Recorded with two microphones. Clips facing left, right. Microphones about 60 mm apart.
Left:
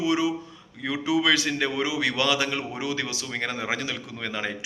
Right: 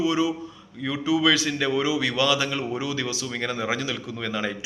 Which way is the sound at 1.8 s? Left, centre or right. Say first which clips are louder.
Right 2 dB; left.